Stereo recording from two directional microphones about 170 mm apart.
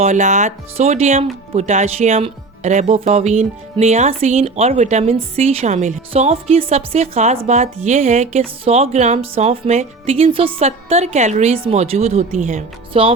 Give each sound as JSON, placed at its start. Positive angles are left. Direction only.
{"t": 0.0, "sound": "speech", "side_deg": -45}
{"t": 12.9, "sound": "speech", "side_deg": -30}